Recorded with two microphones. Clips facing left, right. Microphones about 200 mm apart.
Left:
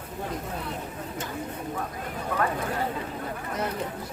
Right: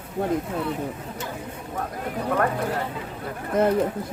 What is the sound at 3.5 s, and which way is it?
Speech, 50° right (ahead or behind).